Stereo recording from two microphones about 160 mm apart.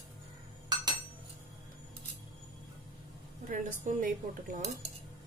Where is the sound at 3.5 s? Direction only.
55° right (ahead or behind).